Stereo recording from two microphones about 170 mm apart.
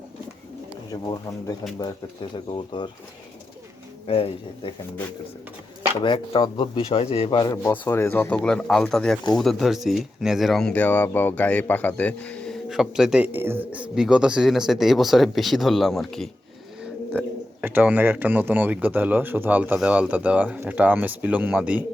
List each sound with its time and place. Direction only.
0.9 s speech: 25° left (ahead or behind)
4.0 s speech: 35° left (ahead or behind)
6.0 s speech: 30° left (ahead or behind); by 16.3 s centre (ahead or behind)
16.8 s speech: 10° right (ahead or behind)